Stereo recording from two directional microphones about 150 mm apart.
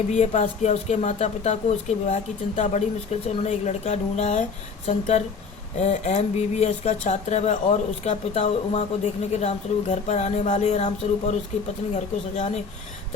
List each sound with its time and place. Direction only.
0.1 s speech: 50° left (ahead or behind)